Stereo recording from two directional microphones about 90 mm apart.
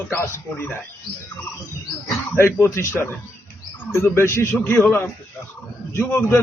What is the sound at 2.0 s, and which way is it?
Bird, 30° left (ahead or behind).